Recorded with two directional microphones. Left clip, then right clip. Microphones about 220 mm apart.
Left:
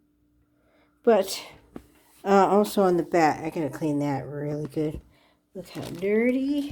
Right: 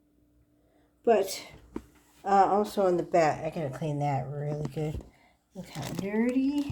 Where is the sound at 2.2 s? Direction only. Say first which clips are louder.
Left 3 dB; 50° left (ahead or behind).